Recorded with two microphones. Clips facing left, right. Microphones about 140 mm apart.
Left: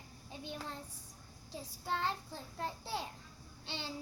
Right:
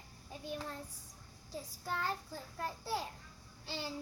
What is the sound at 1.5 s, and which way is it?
A child's voice, 25° left (ahead or behind).